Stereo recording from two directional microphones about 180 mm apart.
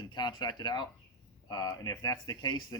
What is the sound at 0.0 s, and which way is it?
Speech, 25° left (ahead or behind).